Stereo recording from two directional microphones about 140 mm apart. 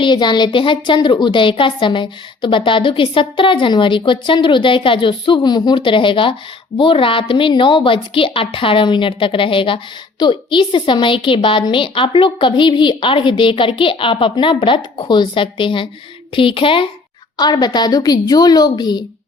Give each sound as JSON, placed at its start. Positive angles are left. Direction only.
{"t": 0.0, "sound": "a woman's voice", "side_deg": 30}